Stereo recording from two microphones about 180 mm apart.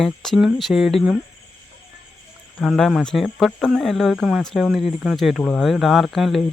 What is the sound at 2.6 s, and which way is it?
Speech, centre (ahead or behind).